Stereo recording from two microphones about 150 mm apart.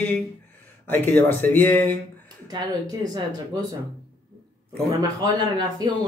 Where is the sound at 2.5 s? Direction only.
25° right (ahead or behind).